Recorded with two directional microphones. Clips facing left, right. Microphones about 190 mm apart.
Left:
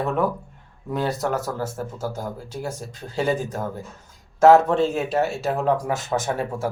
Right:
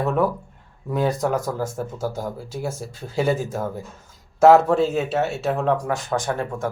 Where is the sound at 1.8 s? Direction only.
Centre (ahead or behind).